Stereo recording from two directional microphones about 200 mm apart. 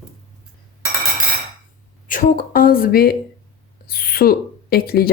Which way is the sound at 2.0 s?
40° left (ahead or behind).